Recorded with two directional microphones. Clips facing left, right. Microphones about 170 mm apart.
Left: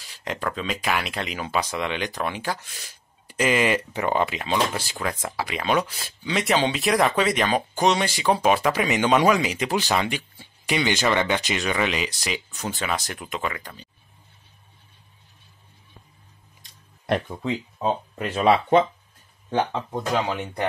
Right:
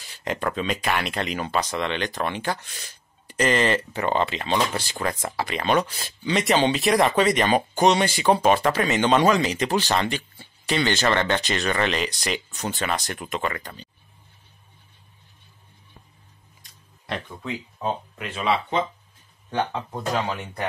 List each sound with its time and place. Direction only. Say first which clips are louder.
0.0 s speech: right 2 dB; centre (ahead or behind)
17.4 s speech: left 4 dB; 25° left (ahead or behind); by 18.9 s 55° left (ahead or behind)
19.5 s speech: left 2 dB; 25° left (ahead or behind)